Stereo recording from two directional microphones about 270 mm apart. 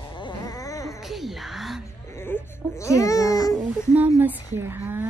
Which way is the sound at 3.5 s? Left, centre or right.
Centre.